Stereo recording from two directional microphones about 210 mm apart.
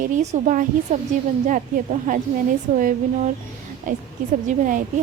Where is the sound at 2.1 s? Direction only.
40° right (ahead or behind).